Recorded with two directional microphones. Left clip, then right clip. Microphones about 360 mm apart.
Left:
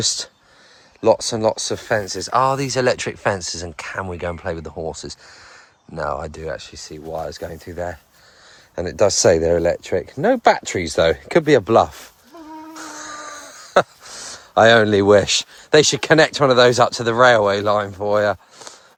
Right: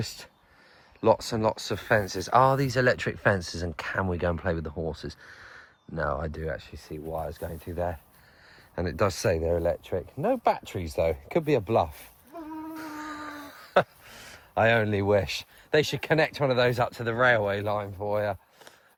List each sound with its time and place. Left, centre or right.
0.0 s speech: centre
9.4 s speech: left
10.2 s speech: left
11.1 s speech: left
12.7 s crow: centre
14.3 s a sound: centre
15.3 s speech: centre
17.7 s speech: left